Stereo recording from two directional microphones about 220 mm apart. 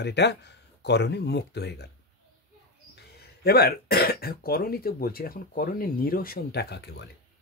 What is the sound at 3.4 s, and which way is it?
Speech, 45° left (ahead or behind).